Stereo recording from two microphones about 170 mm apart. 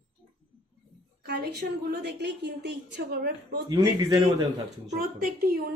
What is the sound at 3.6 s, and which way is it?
Speech, 25° right (ahead or behind).